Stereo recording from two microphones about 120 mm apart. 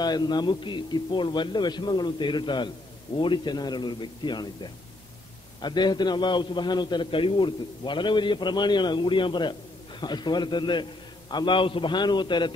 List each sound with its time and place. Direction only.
0.0 s a man's voice: 35° left (ahead or behind)
5.6 s a man's voice: 40° left (ahead or behind)